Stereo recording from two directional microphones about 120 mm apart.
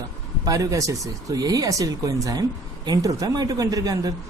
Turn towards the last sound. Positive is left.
turn(degrees=-30)  # may be behind; listen again after turning